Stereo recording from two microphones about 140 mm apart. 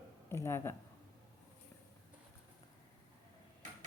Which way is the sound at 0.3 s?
20° left (ahead or behind).